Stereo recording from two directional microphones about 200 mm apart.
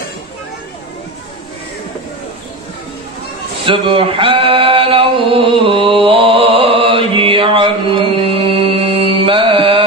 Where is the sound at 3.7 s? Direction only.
25° right (ahead or behind).